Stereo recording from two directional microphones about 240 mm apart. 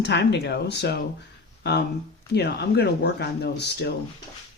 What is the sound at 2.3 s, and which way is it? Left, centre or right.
Speech, left.